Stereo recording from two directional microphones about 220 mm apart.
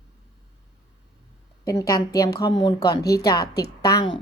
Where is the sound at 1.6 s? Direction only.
15° left (ahead or behind).